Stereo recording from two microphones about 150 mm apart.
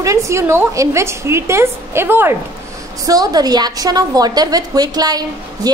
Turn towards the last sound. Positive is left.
turn(degrees=-25)  # may be behind; listen again after turning